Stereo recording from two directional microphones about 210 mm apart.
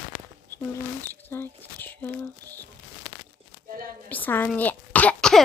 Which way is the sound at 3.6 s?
45° right (ahead or behind).